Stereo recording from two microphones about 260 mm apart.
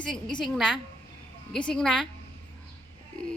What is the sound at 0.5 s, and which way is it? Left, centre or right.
Speech, centre.